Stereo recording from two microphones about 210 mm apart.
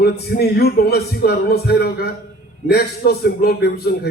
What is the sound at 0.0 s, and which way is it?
A man's voice, 50° left (ahead or behind).